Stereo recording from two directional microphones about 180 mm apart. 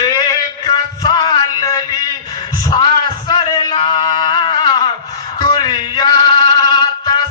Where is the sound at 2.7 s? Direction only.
25° left (ahead or behind).